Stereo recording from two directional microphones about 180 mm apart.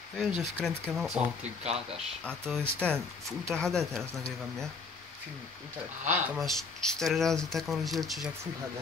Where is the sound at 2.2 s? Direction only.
5° left (ahead or behind).